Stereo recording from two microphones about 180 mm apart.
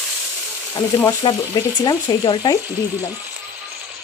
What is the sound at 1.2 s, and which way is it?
Frying, 25° left (ahead or behind).